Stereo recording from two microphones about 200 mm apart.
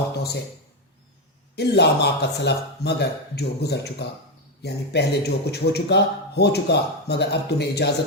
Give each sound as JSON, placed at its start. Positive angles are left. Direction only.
{"t": 1.5, "sound": "a man's voice", "side_deg": 55}